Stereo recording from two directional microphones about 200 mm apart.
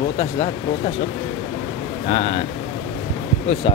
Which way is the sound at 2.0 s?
25° left (ahead or behind).